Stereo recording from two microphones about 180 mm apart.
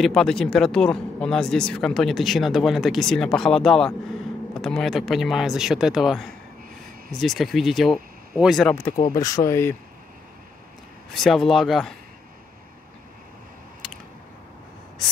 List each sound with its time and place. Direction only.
0.0 s speech: 5° left (ahead or behind)
9.1 s speech: 20° left (ahead or behind)
11.1 s speech: centre (ahead or behind)